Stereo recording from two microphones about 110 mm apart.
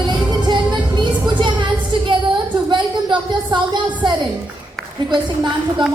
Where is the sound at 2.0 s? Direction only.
45° right (ahead or behind).